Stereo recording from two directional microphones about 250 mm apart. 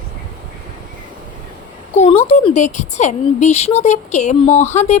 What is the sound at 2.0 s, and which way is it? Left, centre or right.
A woman's voice, left.